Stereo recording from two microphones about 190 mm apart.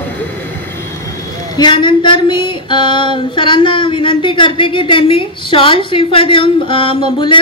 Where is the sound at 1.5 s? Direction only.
25° left (ahead or behind).